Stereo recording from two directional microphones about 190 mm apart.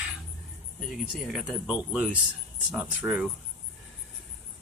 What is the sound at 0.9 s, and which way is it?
Speech, centre (ahead or behind).